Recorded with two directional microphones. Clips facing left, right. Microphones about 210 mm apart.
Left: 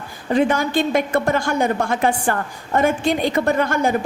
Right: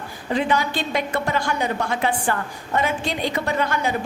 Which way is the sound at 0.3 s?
50° left (ahead or behind).